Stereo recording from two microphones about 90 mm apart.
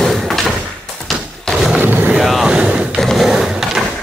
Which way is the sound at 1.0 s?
Centre (ahead or behind).